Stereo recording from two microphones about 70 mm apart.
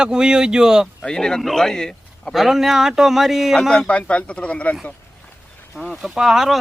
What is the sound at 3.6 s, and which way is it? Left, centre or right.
A man's voice, centre.